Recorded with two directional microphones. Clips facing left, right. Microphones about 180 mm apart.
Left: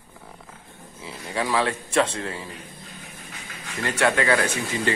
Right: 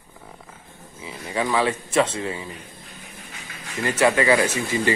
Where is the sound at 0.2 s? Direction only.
Centre (ahead or behind).